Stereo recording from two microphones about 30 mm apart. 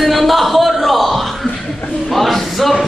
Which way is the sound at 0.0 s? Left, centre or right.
Centre.